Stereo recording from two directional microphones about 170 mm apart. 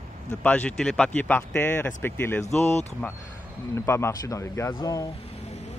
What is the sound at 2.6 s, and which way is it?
Speech, 40° left (ahead or behind).